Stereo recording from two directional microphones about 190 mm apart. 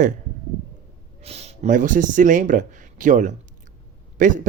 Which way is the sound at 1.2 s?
35° right (ahead or behind).